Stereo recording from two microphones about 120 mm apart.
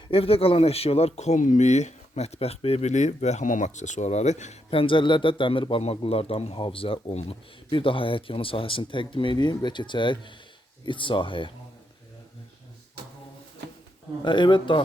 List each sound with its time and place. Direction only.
0.1 s speech: 50° left (ahead or behind); by 4.6 s 75° left (ahead or behind)
4.7 s speech: 45° left (ahead or behind)
7.7 s speech: 45° left (ahead or behind)
14.2 s speech: 40° left (ahead or behind)